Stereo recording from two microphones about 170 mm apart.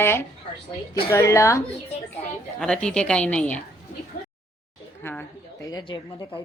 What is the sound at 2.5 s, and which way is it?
A woman's voice, 5° left (ahead or behind).